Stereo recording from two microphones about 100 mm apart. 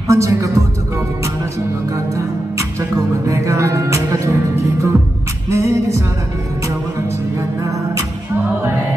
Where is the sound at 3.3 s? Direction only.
30° right (ahead or behind).